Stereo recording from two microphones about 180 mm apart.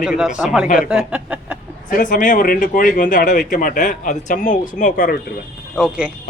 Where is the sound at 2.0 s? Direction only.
45° left (ahead or behind).